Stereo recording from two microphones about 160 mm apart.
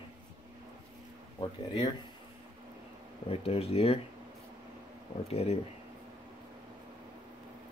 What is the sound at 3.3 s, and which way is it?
Speech, 35° left (ahead or behind).